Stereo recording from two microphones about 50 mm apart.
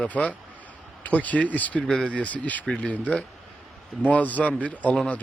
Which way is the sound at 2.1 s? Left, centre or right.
Left.